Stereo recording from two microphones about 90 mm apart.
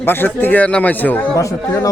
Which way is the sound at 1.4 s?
35° left (ahead or behind).